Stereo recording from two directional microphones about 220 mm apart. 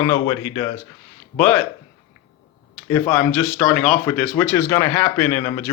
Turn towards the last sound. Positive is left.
turn(degrees=15)  # may be behind; listen again after turning